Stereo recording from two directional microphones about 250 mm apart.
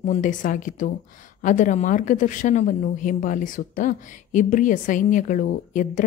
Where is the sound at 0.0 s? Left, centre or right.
Left.